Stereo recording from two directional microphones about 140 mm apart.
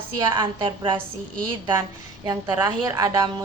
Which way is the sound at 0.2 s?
35° right (ahead or behind).